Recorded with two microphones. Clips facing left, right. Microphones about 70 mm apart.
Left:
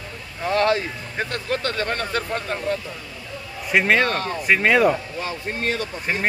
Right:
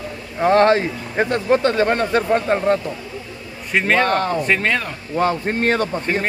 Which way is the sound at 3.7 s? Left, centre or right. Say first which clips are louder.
Right 1 dB; centre.